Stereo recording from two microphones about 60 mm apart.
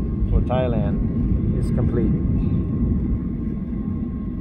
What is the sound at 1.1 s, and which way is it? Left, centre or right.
Vehicle, left.